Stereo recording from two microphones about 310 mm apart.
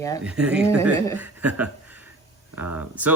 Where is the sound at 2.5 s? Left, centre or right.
Right.